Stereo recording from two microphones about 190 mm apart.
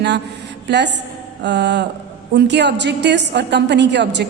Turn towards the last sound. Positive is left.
turn(degrees=-65)  # may be behind; listen again after turning